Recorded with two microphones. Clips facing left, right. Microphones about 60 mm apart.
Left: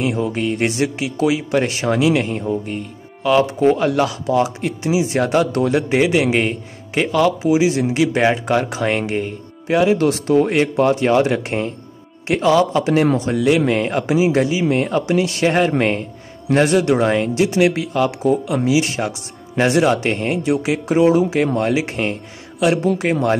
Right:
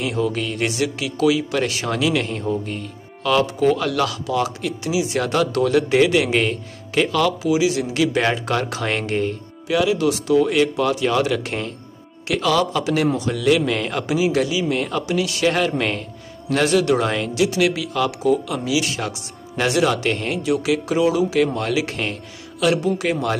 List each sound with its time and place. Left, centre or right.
0.0 s speech: left
9.7 s speech: left